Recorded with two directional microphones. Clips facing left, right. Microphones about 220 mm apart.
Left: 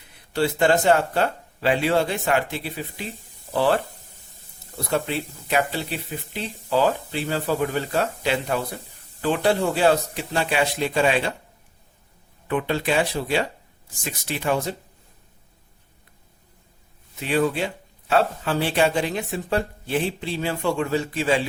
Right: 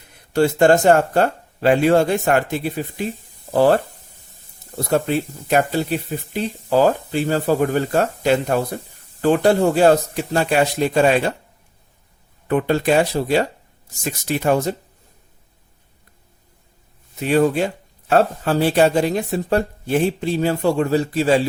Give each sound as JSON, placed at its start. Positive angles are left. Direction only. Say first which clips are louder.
{"t": 0.1, "sound": "speech", "louder": "right 6 dB", "side_deg": -45}
{"t": 4.9, "sound": "speech", "louder": "right 6 dB", "side_deg": -45}
{"t": 12.5, "sound": "speech", "louder": "right 6 dB", "side_deg": -45}
{"t": 17.2, "sound": "speech", "louder": "right 6 dB", "side_deg": -45}